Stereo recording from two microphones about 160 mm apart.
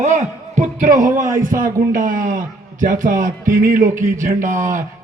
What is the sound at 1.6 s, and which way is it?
Speech, 60° right (ahead or behind).